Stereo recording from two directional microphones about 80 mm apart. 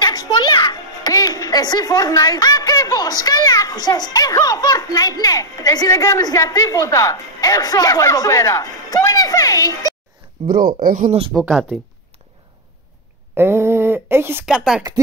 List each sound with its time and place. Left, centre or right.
0.0 s music: left
1.1 s speech: left
11.3 s speech: centre
13.3 s speech: right
14.4 s speech: centre